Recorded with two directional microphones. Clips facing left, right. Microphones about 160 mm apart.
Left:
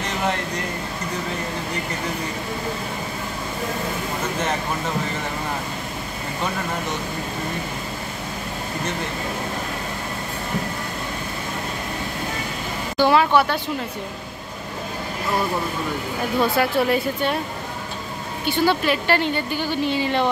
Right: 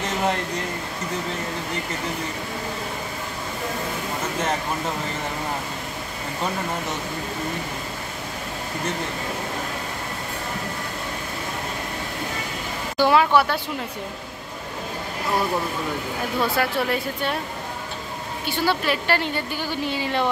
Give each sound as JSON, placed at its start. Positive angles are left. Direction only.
{"t": 12.9, "sound": "speech", "side_deg": -10}
{"t": 16.5, "sound": "a woman's voice", "side_deg": 5}
{"t": 18.7, "sound": "a woman's voice", "side_deg": -5}